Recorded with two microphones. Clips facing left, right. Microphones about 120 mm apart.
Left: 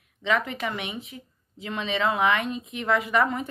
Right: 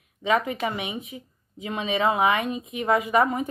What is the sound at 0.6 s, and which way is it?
A woman's voice, 20° right (ahead or behind).